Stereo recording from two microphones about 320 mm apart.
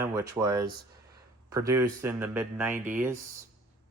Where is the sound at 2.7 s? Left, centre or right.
Right.